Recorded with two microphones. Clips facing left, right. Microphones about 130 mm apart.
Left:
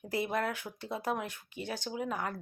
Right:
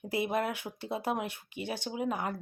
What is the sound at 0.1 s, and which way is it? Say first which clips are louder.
Speech: right 2 dB; 20° right (ahead or behind).